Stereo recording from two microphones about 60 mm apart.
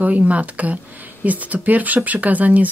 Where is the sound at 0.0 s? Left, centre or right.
Right.